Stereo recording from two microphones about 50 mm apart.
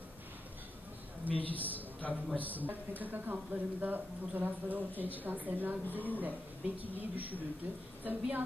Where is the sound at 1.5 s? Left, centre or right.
Left.